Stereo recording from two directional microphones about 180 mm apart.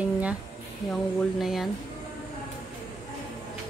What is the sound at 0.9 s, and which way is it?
Speech, centre (ahead or behind).